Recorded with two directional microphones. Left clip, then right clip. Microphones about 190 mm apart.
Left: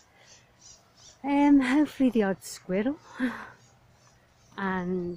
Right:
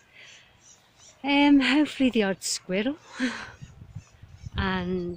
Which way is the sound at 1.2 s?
5° right (ahead or behind).